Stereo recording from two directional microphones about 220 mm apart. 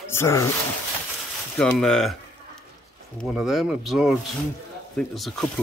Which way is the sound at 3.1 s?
Centre (ahead or behind).